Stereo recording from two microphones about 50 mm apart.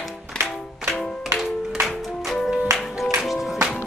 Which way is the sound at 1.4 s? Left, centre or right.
Centre.